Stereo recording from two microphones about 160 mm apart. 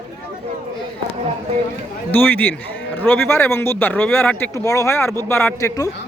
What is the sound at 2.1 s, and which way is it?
Speech, 10° left (ahead or behind).